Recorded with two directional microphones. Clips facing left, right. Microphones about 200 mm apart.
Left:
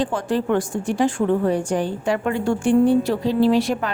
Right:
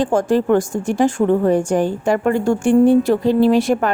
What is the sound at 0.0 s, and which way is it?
A woman's voice, 45° right (ahead or behind).